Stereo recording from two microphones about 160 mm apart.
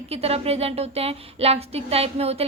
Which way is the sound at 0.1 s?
40° right (ahead or behind).